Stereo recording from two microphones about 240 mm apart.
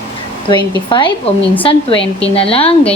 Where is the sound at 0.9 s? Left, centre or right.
Centre.